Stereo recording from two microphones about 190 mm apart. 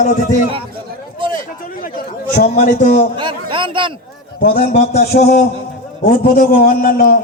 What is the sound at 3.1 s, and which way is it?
Speech, 25° right (ahead or behind).